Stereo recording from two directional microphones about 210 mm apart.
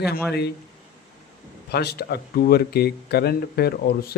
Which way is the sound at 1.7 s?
50° left (ahead or behind).